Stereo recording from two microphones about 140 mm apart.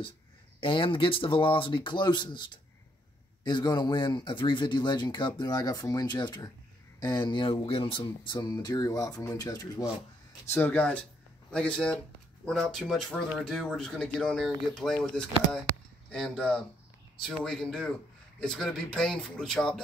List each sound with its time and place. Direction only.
0.6 s speech: 40° left (ahead or behind)
10.5 s speech: 15° left (ahead or behind)